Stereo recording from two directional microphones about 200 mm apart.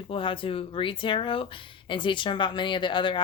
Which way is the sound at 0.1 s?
25° left (ahead or behind).